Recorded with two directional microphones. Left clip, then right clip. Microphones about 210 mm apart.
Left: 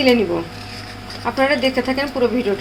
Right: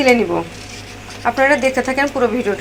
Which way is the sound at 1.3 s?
Centre (ahead or behind).